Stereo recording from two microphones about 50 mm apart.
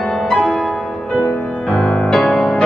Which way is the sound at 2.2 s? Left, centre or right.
Centre.